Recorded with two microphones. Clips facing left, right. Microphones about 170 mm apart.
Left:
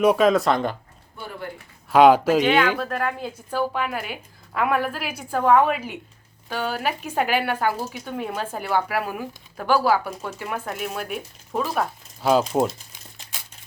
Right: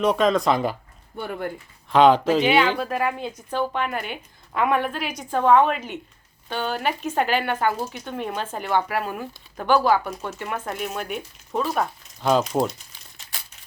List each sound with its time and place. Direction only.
0.0 s speech: 10° left (ahead or behind)
1.1 s speech: 55° right (ahead or behind)
1.9 s speech: 10° left (ahead or behind)
2.4 s speech: 5° right (ahead or behind)
3.2 s speech: 5° left (ahead or behind)